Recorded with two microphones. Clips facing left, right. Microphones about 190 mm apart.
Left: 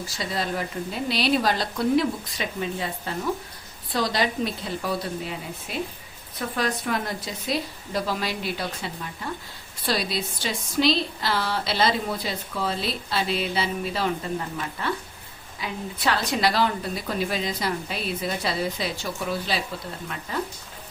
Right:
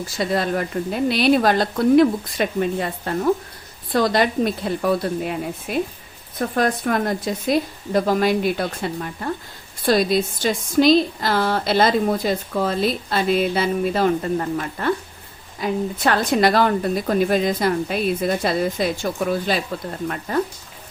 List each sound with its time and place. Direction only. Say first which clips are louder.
0.2 s a woman's voice: right 7 dB; 55° right (ahead or behind)